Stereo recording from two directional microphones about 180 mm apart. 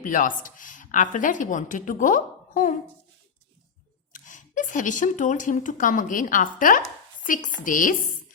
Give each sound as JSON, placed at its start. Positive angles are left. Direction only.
{"t": 0.0, "sound": "speech", "side_deg": 45}
{"t": 4.1, "sound": "speech", "side_deg": 45}